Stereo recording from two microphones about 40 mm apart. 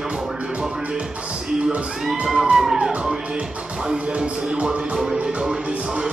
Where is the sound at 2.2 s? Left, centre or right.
Centre.